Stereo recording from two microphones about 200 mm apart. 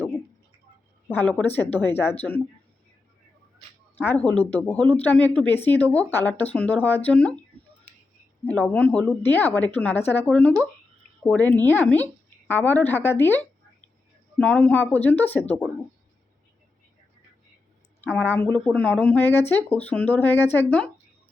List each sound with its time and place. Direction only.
1.0 s speech: 10° left (ahead or behind)
3.9 s speech: 10° left (ahead or behind)
8.6 s speech: 5° left (ahead or behind)
18.0 s speech: 10° left (ahead or behind)